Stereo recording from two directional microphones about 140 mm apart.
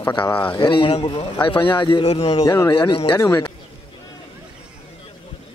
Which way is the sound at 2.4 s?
30° left (ahead or behind).